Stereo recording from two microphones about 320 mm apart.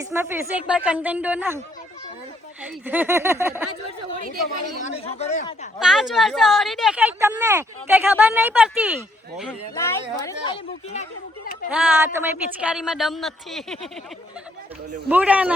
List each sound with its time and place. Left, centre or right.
0.0 s speech: centre
2.6 s speech: centre
4.9 s speech: left
5.8 s speech: centre
9.4 s speech: centre
11.7 s speech: centre
15.1 s speech: centre